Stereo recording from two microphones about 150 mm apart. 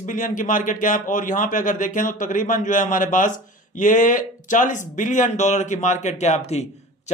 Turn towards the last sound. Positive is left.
turn(degrees=50)  # may be behind; listen again after turning